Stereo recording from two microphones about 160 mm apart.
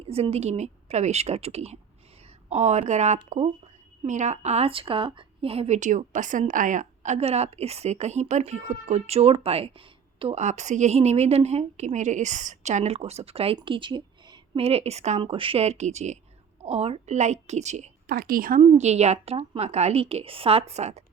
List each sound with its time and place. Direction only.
0.0 s a woman's voice: 40° right (ahead or behind)
15.2 s a woman's voice: 35° right (ahead or behind)
18.0 s a woman's voice: 65° right (ahead or behind)
18.9 s a woman's voice: 45° right (ahead or behind)